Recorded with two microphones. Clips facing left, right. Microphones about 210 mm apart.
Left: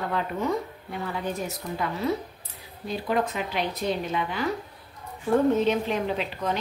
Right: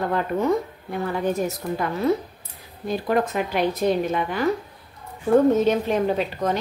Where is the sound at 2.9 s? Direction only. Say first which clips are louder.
Right 4 dB; 50° right (ahead or behind).